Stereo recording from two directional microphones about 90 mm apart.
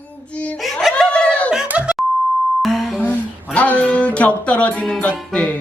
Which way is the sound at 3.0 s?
15° left (ahead or behind).